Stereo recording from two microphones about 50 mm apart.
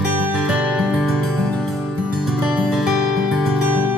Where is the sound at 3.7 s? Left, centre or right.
Right.